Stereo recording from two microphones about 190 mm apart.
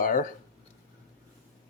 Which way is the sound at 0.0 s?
45° left (ahead or behind).